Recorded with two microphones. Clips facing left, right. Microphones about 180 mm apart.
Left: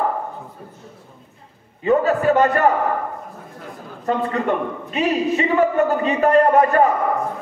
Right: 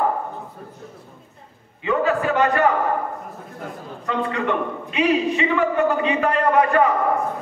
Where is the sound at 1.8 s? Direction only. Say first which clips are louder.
Left 3 dB; 40° left (ahead or behind).